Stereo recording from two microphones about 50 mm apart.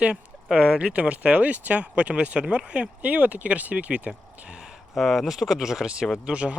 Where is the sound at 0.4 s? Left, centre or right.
Centre.